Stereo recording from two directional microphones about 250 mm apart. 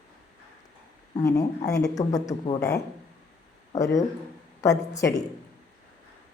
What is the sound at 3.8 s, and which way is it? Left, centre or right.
A woman's voice, centre.